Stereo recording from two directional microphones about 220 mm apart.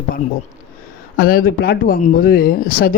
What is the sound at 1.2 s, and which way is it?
Speech, 40° left (ahead or behind).